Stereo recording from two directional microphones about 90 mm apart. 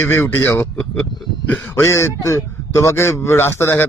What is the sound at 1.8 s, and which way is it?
Speech, 30° left (ahead or behind).